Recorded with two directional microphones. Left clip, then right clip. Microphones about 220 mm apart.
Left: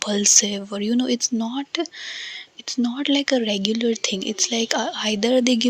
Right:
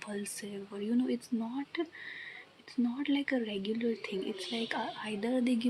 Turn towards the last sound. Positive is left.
turn(degrees=35)  # may be behind; listen again after turning